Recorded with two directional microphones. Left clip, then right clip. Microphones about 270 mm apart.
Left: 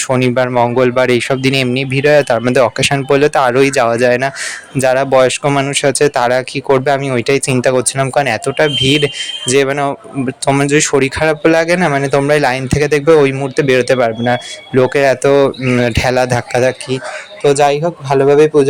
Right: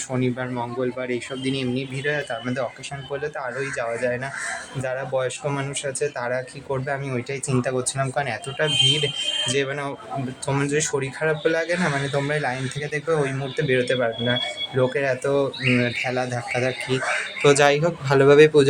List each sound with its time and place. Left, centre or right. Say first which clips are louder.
0.1 s speech: left 14 dB; left
17.4 s speech: left 6 dB; centre